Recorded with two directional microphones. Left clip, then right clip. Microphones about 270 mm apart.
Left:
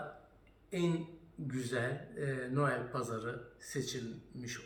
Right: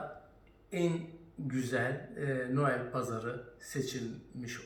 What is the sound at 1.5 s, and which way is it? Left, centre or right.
A man's voice, centre.